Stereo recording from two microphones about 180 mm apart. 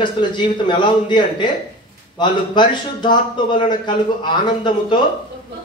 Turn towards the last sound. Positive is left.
turn(degrees=25)  # may be behind; listen again after turning